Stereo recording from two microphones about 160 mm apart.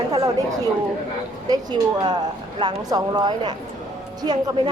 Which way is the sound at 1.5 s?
25° right (ahead or behind).